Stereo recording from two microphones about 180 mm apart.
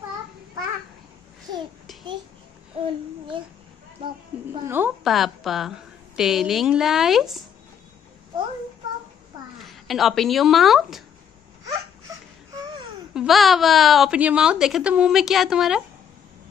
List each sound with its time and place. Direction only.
2.7 s a child's voice: 30° right (ahead or behind)
4.6 s a woman's voice: 10° right (ahead or behind)
5.0 s a woman's voice: centre (ahead or behind)
9.6 s speech: centre (ahead or behind)
13.1 s a woman's voice: centre (ahead or behind)